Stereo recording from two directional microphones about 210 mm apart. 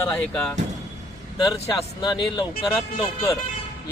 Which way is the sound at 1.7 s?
20° left (ahead or behind).